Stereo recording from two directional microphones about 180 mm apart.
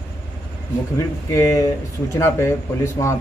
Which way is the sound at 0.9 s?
15° left (ahead or behind).